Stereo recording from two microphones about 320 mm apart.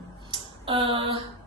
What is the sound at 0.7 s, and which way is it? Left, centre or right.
Speech, centre.